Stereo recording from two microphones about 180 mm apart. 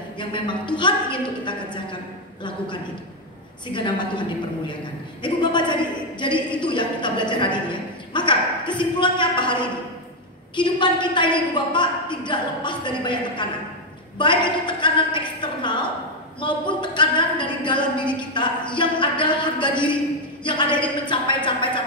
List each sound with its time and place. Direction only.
0.2 s a woman's voice: 25° left (ahead or behind)
3.6 s a woman's voice: 25° left (ahead or behind)
5.2 s a woman's voice: 25° left (ahead or behind)